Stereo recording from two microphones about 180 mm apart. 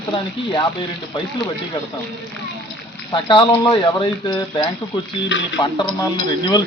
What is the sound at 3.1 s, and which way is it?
Speech, 25° left (ahead or behind).